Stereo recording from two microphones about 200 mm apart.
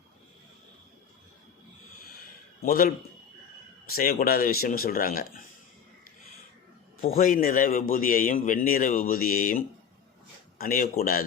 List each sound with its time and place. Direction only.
2.6 s a man's voice: 45° left (ahead or behind)
3.9 s a man's voice: 50° left (ahead or behind)
7.0 s a man's voice: 45° left (ahead or behind)
10.6 s a man's voice: 45° left (ahead or behind)